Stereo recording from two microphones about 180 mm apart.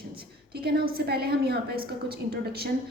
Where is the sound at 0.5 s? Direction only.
60° right (ahead or behind).